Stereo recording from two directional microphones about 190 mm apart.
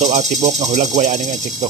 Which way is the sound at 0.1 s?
35° right (ahead or behind).